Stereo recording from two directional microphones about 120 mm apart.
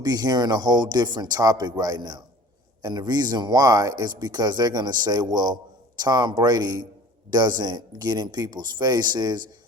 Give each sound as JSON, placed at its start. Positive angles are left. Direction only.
{"t": 0.0, "sound": "speech", "side_deg": -35}